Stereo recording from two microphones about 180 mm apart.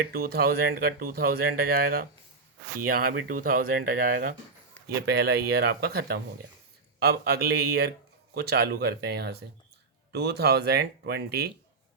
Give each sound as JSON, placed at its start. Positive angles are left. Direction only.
{"t": 0.1, "sound": "speech", "side_deg": -55}